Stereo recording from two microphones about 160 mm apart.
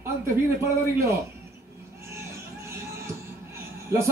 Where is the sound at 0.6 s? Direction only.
20° right (ahead or behind).